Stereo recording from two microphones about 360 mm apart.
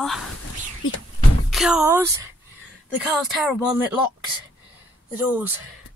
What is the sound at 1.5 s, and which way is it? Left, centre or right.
Speech, centre.